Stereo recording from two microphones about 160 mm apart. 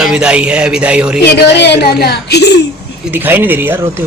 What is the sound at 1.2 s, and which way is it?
A woman's voice, 90° left.